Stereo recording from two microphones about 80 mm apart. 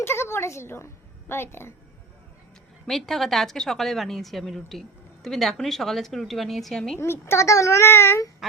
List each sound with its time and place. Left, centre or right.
0.0 s a woman's voice: left
2.8 s a woman's voice: centre
7.0 s a child's voice: left